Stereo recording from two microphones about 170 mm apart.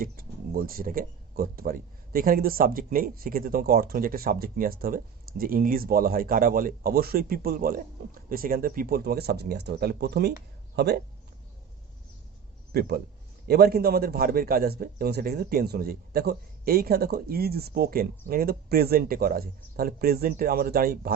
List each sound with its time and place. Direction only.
0.0 s speech: 55° right (ahead or behind)
13.5 s speech: 65° right (ahead or behind)